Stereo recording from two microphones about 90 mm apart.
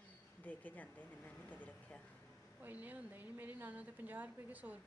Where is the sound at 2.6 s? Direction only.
20° right (ahead or behind).